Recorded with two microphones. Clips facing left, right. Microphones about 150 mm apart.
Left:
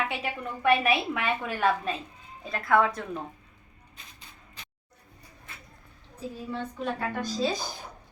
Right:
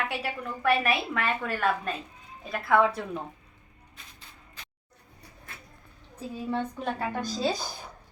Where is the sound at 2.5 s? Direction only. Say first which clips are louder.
Right 1 dB; 5° right (ahead or behind).